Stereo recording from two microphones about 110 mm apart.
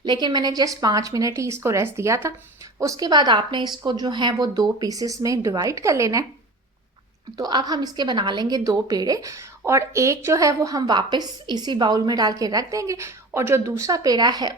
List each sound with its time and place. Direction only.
0.0 s a woman's voice: 40° right (ahead or behind)
7.3 s a woman's voice: 35° right (ahead or behind)